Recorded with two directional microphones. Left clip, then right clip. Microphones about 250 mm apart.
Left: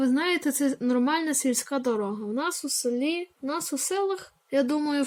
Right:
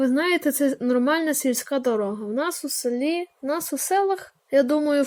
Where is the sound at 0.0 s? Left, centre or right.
Centre.